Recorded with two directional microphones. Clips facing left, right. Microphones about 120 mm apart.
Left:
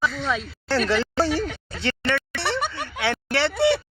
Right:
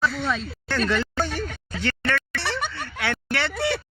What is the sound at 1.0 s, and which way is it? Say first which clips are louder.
Speech: left 5 dB; 30° left (ahead or behind).